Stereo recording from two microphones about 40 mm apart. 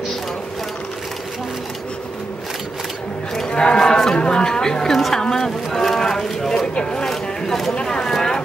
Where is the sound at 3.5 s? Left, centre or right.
Left.